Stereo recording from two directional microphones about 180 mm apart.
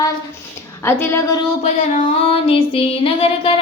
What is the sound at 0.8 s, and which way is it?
Speech, 10° left (ahead or behind).